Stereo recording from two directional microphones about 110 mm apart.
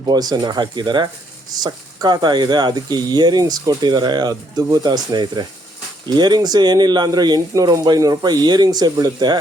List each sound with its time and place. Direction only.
0.0 s speech: 35° right (ahead or behind)